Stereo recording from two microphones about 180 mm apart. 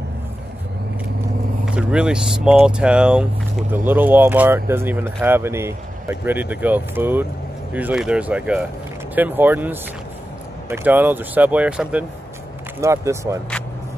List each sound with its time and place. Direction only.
1.7 s speech: 5° right (ahead or behind)